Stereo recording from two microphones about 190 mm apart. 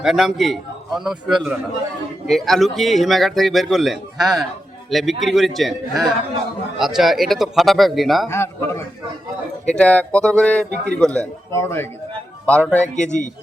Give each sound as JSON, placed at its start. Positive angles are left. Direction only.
{"t": 0.0, "sound": "a man's voice", "side_deg": 0}
{"t": 8.3, "sound": "a man's voice", "side_deg": 15}
{"t": 13.1, "sound": "speech", "side_deg": 40}